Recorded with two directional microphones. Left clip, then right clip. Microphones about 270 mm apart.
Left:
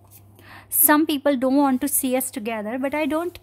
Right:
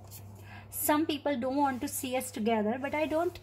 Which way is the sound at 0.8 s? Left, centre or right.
Left.